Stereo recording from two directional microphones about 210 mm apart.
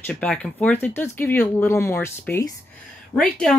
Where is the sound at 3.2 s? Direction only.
Centre (ahead or behind).